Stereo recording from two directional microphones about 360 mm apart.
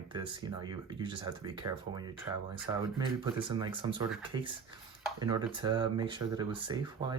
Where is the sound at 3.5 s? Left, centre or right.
Centre.